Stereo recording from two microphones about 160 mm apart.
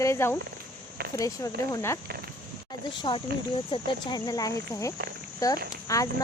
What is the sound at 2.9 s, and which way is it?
Speech, 30° left (ahead or behind).